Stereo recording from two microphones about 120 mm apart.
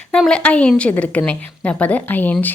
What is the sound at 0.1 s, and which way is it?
Speech, 5° left (ahead or behind).